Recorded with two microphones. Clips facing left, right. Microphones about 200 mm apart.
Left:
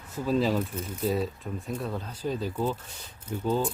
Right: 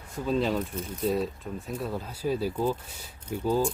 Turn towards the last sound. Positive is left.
turn(degrees=-10)  # may be behind; listen again after turning